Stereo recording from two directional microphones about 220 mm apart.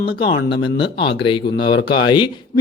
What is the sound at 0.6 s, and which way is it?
Speech, 20° left (ahead or behind).